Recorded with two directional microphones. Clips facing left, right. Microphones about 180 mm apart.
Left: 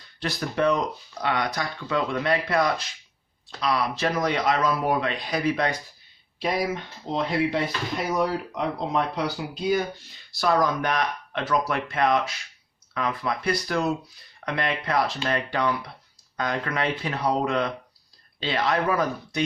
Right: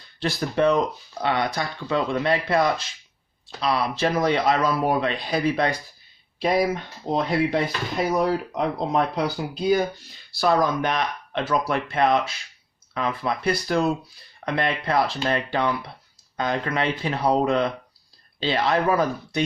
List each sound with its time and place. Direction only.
0.2 s speech: 30° right (ahead or behind)
7.1 s speech: 45° right (ahead or behind)
10.3 s speech: 30° right (ahead or behind)